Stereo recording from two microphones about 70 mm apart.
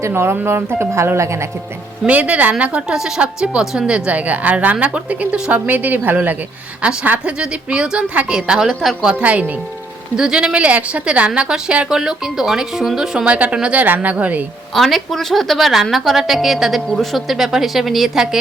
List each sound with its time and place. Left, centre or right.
0.1 s speech: right
2.0 s a woman's voice: right; by 9.1 s centre
9.1 s a woman's voice: centre
14.8 s a woman's voice: centre